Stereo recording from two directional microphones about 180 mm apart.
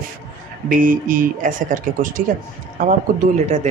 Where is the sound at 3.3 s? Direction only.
40° right (ahead or behind).